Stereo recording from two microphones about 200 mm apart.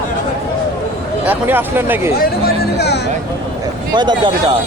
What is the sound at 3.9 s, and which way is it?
Speech, 20° right (ahead or behind).